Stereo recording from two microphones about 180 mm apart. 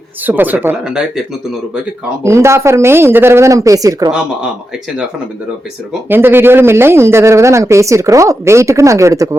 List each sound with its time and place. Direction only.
0.3 s speech: 10° right (ahead or behind)
2.2 s speech: 15° right (ahead or behind)
6.1 s speech: 10° right (ahead or behind)